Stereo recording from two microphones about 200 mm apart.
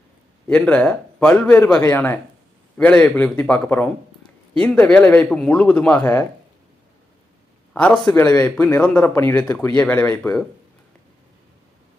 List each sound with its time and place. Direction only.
0.4 s a man's voice: 5° left (ahead or behind)
7.7 s a man's voice: 5° left (ahead or behind)